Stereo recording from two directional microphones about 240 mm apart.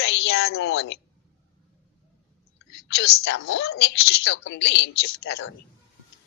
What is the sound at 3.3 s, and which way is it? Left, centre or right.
A woman's voice, left.